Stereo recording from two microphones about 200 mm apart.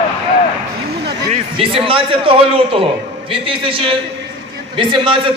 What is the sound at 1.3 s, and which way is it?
A man's voice, 30° right (ahead or behind).